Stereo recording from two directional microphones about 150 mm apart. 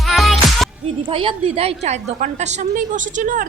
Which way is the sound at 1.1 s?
35° right (ahead or behind).